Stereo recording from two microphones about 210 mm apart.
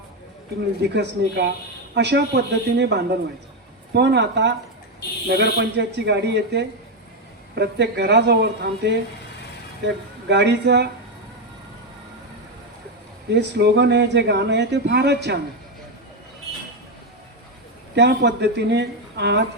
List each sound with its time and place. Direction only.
0.8 s speech: 50° right (ahead or behind)
13.3 s speech: 50° right (ahead or behind)
17.9 s speech: 55° right (ahead or behind)